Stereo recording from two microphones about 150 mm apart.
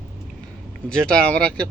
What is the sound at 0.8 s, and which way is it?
Speech, 5° left (ahead or behind).